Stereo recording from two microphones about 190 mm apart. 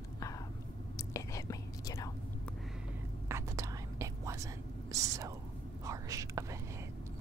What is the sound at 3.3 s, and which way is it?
Whispering, 15° right (ahead or behind).